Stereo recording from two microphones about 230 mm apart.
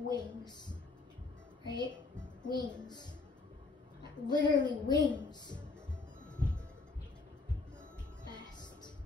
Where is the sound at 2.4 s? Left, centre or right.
Centre.